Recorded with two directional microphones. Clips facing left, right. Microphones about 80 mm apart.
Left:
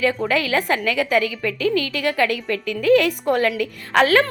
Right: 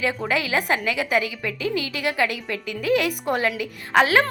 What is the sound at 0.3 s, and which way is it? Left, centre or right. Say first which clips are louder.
A woman's voice: left 2 dB; centre.